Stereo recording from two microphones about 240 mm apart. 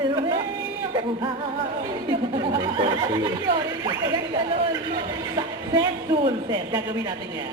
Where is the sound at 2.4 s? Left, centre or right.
Right.